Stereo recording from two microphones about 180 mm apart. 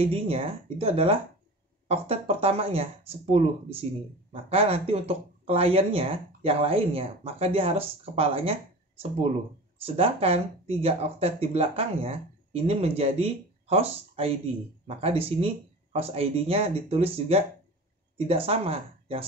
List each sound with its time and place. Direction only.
0.0 s speech: 30° right (ahead or behind)